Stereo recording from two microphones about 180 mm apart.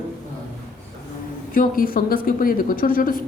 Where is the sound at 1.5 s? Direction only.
50° left (ahead or behind).